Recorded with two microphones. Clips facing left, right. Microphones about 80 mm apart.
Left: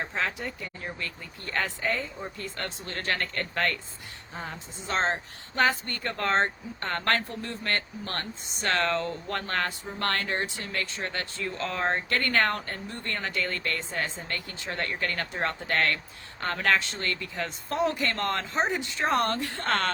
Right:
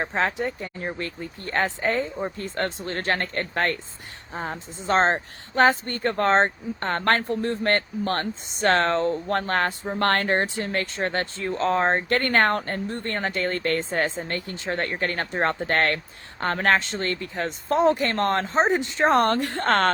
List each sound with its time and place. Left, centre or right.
0.0 s speech: right